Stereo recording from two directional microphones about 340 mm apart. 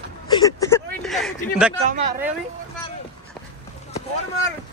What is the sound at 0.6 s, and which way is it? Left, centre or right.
Vehicle, centre.